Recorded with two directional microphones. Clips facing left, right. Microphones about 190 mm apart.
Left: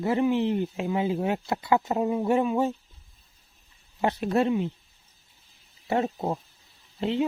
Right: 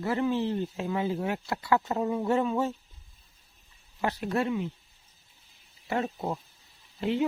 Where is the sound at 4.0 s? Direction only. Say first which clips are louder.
Left 5 dB; 25° left (ahead or behind).